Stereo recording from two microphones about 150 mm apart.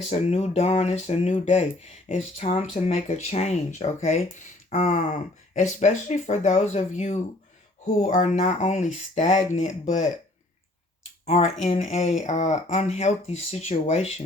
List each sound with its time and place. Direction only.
0.1 s speech: 40° left (ahead or behind)
11.3 s speech: 50° left (ahead or behind)